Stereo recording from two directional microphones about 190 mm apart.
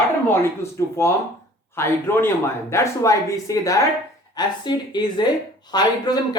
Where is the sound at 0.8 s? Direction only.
15° left (ahead or behind).